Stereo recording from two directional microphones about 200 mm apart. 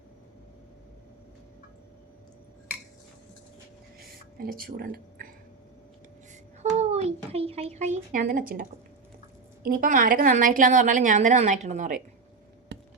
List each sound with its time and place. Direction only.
4.0 s a sound: 50° right (ahead or behind)
6.7 s a child's voice: 30° right (ahead or behind)
9.6 s a woman's voice: 45° right (ahead or behind)
12.7 s tap: 60° right (ahead or behind)